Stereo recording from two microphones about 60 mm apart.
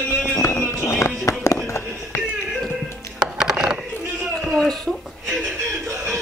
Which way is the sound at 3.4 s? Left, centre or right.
Centre.